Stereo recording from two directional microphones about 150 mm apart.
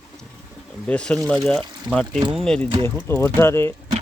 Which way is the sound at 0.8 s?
10° left (ahead or behind).